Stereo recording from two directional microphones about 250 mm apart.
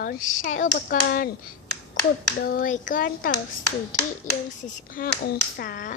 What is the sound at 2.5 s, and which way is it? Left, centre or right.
Speech, left.